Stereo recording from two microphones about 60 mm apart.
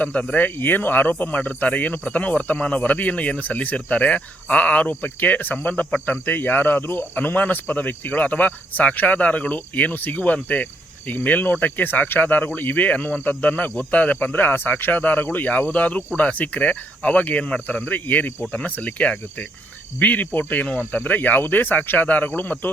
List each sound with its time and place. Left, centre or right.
0.0 s speech: left